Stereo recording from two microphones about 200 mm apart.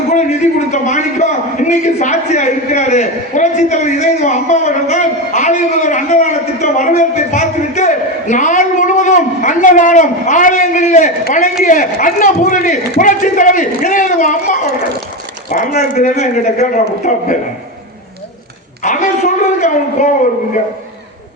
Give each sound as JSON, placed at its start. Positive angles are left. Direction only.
{"t": 0.1, "sound": "a man's voice", "side_deg": 35}
{"t": 18.8, "sound": "a man's voice", "side_deg": 35}